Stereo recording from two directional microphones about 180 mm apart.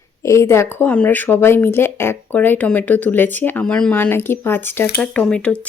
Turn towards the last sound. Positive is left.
turn(degrees=5)  # may be behind; listen again after turning